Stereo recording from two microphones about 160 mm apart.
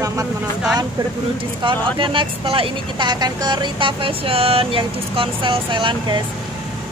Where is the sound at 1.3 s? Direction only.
30° right (ahead or behind).